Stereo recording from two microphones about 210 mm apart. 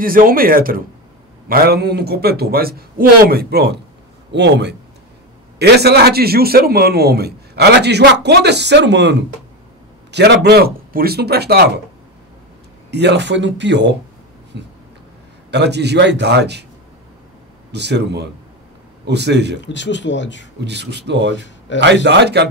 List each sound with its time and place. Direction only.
0.0 s a man's voice: 45° right (ahead or behind)
12.9 s speech: 55° right (ahead or behind)
14.5 s a sound: 55° right (ahead or behind)
15.5 s a man's voice: 55° right (ahead or behind)
17.7 s a man's voice: 55° right (ahead or behind)
19.6 s speech: 60° left (ahead or behind)
20.6 s speech: 55° right (ahead or behind)